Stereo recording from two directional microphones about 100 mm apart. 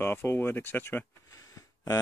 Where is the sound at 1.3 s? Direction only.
35° left (ahead or behind).